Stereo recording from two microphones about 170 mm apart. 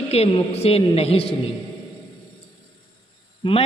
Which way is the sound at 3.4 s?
30° left (ahead or behind).